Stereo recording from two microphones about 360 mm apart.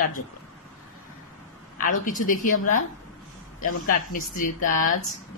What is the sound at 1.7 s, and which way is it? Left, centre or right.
Speech, left.